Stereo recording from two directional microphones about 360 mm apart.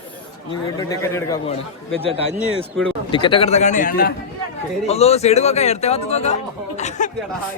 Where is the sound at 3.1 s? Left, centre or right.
Centre.